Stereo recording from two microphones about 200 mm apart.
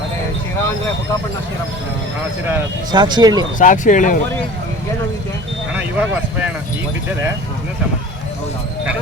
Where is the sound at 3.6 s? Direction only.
40° left (ahead or behind).